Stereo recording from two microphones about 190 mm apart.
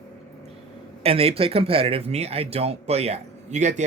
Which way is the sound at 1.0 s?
30° right (ahead or behind).